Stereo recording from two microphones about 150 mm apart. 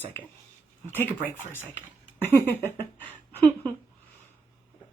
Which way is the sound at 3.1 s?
15° left (ahead or behind).